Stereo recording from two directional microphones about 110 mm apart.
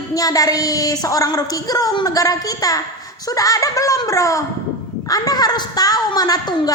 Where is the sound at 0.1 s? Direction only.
35° left (ahead or behind).